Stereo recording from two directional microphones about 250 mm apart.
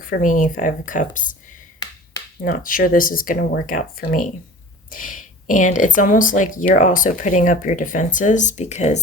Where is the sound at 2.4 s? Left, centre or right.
Left.